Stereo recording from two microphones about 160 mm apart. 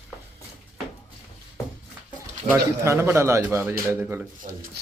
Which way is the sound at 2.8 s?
15° right (ahead or behind).